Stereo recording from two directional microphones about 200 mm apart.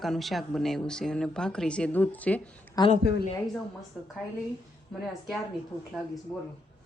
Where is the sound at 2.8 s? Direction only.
20° left (ahead or behind).